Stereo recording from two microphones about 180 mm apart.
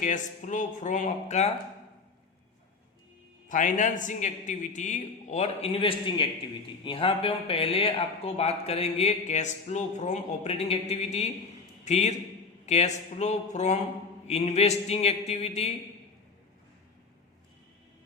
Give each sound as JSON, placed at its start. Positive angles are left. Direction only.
{"t": 0.0, "sound": "a man's voice", "side_deg": 45}
{"t": 3.5, "sound": "a man's voice", "side_deg": 45}